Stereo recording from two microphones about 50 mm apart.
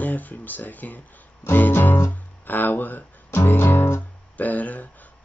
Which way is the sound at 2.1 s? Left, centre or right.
Left.